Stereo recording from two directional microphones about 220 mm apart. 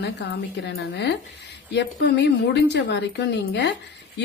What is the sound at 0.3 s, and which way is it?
Speech, 50° left (ahead or behind).